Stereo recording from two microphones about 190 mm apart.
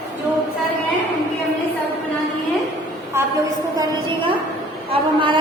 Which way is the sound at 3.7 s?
25° right (ahead or behind).